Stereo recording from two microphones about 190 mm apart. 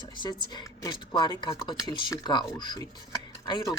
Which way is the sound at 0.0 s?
25° left (ahead or behind).